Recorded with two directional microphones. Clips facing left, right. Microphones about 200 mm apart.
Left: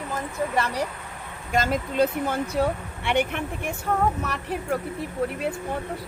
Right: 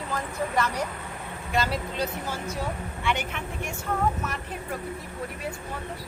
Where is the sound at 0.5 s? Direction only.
30° left (ahead or behind).